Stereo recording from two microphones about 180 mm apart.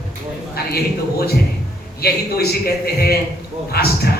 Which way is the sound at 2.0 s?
60° left (ahead or behind).